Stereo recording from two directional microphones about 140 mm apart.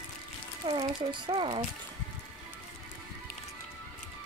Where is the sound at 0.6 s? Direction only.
35° right (ahead or behind).